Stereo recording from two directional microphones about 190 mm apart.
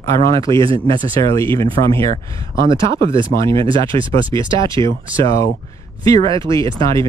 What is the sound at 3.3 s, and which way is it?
Speech, 15° left (ahead or behind).